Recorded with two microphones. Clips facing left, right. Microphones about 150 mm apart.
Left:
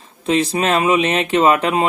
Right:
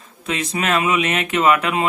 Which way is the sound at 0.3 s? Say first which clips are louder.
Left 5 dB; 30° left (ahead or behind).